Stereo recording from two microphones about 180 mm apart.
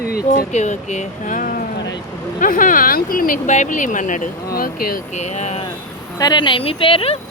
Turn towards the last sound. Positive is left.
turn(degrees=30)  # may be behind; listen again after turning